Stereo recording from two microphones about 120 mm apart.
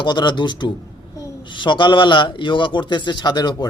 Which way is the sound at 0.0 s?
40° left (ahead or behind).